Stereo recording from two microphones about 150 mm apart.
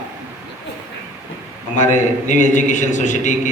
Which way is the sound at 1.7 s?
55° left (ahead or behind).